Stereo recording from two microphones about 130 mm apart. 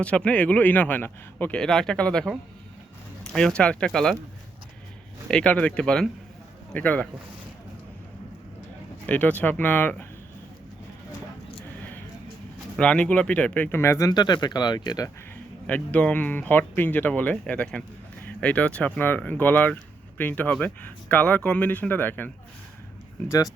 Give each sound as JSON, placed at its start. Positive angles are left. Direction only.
{"t": 0.0, "sound": "speech", "side_deg": 10}
{"t": 5.3, "sound": "speech", "side_deg": 10}
{"t": 9.0, "sound": "speech", "side_deg": 10}
{"t": 12.7, "sound": "speech", "side_deg": 10}
{"t": 14.1, "sound": "speech", "side_deg": 35}
{"t": 15.6, "sound": "speech", "side_deg": 10}